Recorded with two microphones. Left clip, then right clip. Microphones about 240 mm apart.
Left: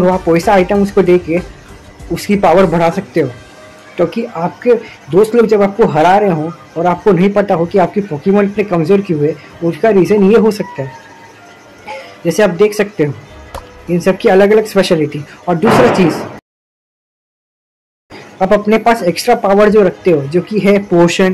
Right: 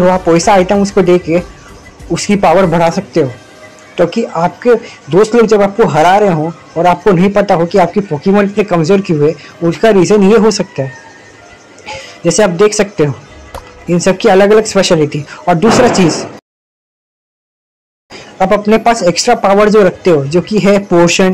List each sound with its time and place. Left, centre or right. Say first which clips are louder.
0.0 s a man's voice: right 2 dB; centre
18.1 s a man's voice: right 1 dB; centre